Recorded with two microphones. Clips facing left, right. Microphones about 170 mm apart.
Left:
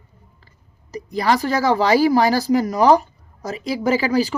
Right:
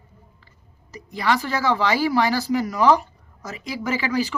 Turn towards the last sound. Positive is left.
turn(degrees=35)  # may be behind; listen again after turning